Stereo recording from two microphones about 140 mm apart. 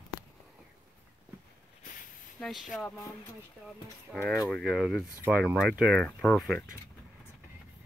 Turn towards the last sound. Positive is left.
turn(degrees=5)  # may be behind; listen again after turning